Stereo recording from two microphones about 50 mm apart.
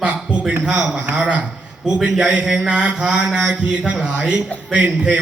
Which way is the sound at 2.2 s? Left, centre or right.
Right.